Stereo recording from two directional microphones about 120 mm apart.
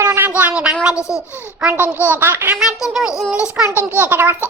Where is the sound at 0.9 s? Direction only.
25° left (ahead or behind).